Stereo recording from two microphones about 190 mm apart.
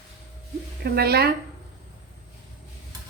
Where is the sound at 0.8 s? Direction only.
55° right (ahead or behind).